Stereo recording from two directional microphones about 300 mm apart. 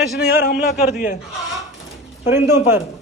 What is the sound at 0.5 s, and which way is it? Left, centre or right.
Speech, left.